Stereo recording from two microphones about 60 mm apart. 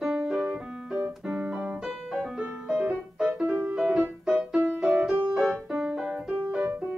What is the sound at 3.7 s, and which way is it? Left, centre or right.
Music, centre.